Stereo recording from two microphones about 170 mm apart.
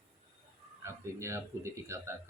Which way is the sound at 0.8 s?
15° right (ahead or behind).